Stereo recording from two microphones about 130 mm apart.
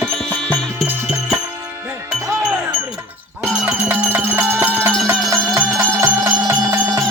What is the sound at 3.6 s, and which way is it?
Music, 15° right (ahead or behind).